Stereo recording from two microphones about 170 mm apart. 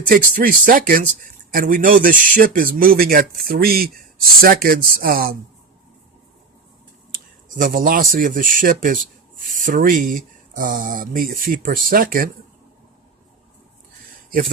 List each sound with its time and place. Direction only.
0.0 s a man's voice: 55° right (ahead or behind)
7.1 s speech: 50° right (ahead or behind)